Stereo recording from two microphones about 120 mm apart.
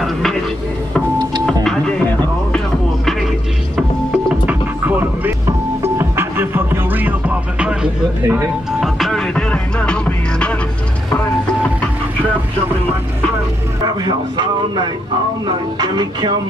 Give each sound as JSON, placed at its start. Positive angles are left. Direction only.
{"t": 0.0, "sound": "a sound", "side_deg": 0}
{"t": 1.4, "sound": "printer", "side_deg": 5}
{"t": 4.3, "sound": "music", "side_deg": -15}
{"t": 14.0, "sound": "speech", "side_deg": -40}